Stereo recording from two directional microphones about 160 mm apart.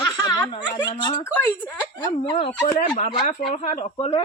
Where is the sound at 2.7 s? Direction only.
50° left (ahead or behind).